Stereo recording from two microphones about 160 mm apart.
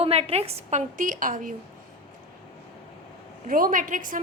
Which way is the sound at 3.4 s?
60° right (ahead or behind).